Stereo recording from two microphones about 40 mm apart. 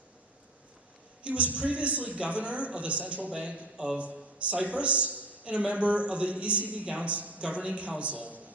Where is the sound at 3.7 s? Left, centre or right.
Centre.